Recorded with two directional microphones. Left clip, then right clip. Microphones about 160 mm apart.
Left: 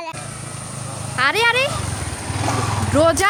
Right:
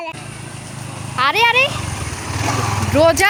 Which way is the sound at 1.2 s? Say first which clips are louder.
Right 3 dB; 15° left (ahead or behind).